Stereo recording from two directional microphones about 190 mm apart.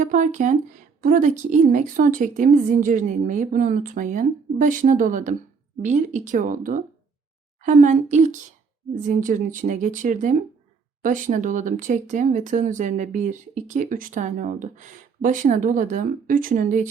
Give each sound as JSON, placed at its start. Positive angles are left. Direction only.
{"t": 0.0, "sound": "a woman's voice", "side_deg": -40}